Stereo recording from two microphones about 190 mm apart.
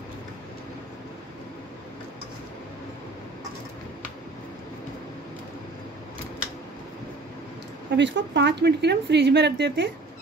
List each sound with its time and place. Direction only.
7.9 s a woman's voice: 65° right (ahead or behind)